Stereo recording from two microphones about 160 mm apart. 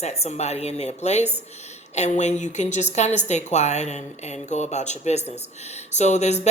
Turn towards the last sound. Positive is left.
turn(degrees=45)  # may be behind; listen again after turning